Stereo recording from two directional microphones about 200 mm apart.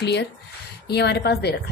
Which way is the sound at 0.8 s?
55° left (ahead or behind).